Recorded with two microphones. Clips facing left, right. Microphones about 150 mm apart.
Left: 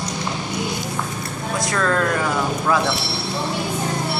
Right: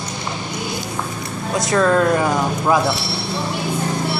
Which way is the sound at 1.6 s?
20° right (ahead or behind).